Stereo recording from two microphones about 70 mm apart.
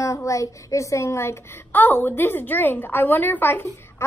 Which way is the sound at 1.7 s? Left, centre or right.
Left.